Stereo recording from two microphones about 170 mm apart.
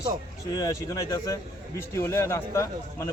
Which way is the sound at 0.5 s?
20° left (ahead or behind).